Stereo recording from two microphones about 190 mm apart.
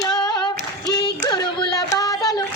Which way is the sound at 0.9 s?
20° left (ahead or behind).